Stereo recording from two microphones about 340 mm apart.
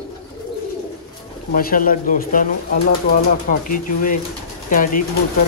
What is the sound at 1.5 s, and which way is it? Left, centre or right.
Speech, left.